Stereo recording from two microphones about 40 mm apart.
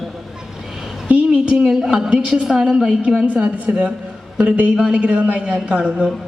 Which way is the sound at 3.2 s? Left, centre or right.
Right.